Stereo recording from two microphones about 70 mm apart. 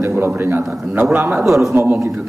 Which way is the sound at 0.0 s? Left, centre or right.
Right.